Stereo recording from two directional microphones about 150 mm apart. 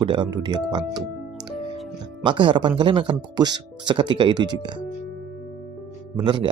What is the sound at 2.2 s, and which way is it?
Speech, 35° right (ahead or behind).